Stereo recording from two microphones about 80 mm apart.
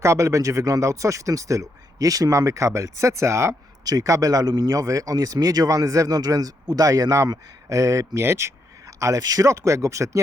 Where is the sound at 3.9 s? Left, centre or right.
Right.